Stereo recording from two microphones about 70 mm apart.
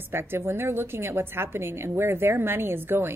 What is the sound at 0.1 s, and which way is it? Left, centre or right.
A woman's voice, right.